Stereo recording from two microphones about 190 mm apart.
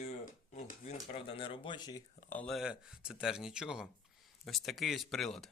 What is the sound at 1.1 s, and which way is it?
Speech, 30° left (ahead or behind).